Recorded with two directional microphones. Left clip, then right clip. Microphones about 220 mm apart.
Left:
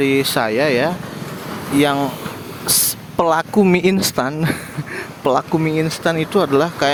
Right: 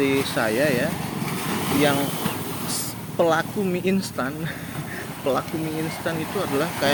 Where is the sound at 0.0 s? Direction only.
45° left (ahead or behind).